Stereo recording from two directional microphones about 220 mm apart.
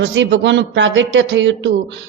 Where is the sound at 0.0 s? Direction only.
55° right (ahead or behind).